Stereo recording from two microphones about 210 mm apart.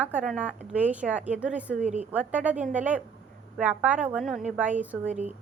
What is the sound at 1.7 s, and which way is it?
A woman's voice, 35° right (ahead or behind).